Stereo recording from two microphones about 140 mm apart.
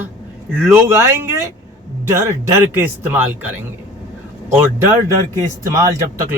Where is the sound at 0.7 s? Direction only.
20° right (ahead or behind).